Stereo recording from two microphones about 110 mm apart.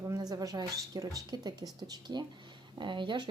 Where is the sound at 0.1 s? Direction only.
35° right (ahead or behind).